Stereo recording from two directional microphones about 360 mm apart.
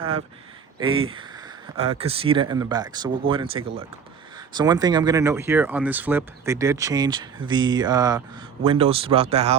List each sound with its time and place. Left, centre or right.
1.7 s speech: centre